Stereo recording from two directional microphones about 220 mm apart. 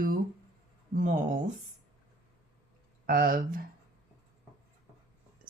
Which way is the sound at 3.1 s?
40° right (ahead or behind).